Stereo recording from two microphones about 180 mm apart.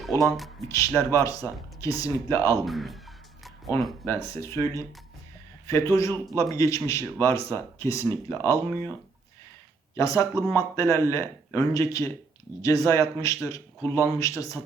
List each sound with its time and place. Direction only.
0.7 s speech: 15° left (ahead or behind)
2.6 s speech: centre (ahead or behind)
4.3 s speech: 15° left (ahead or behind)
9.9 s speech: 15° left (ahead or behind)